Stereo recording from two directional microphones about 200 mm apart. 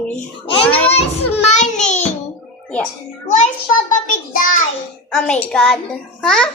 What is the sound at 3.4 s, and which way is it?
Speech, 40° left (ahead or behind).